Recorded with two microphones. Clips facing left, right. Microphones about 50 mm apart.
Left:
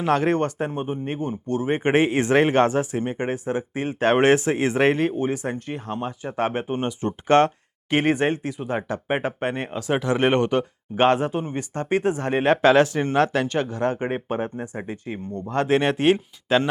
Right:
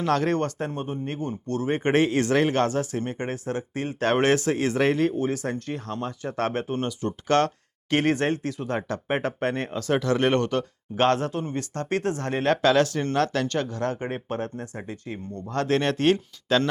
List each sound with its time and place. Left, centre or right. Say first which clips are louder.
0.0 s speech: left 3 dB; centre